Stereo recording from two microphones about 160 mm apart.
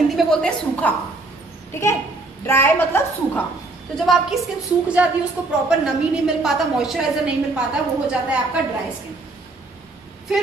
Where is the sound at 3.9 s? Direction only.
Centre (ahead or behind).